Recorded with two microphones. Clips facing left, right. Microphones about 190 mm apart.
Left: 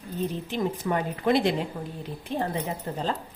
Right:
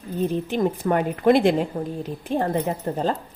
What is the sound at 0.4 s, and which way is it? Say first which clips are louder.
A woman's voice: right 5 dB; 50° right (ahead or behind).